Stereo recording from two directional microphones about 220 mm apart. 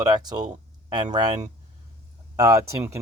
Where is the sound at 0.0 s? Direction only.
20° right (ahead or behind).